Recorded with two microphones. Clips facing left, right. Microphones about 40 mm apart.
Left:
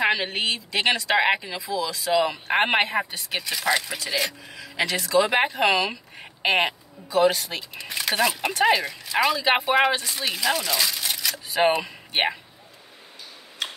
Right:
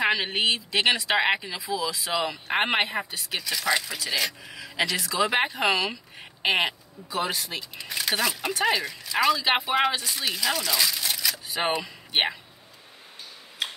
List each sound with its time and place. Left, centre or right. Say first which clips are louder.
0.0 s a sound: left 2 dB; centre
0.3 s speech: right 1 dB; centre
2.2 s speech: left 4 dB; centre
2.5 s speech: left 3 dB; centre
3.3 s speech: right 2 dB; centre
4.5 s a sound: left 1 dB; centre
4.9 s speech: left 5 dB; centre